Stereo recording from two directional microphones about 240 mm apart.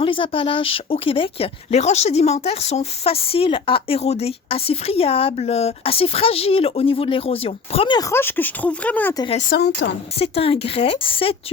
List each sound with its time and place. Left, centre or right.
0.0 s speech: left
9.5 s speech: left
10.2 s speech: left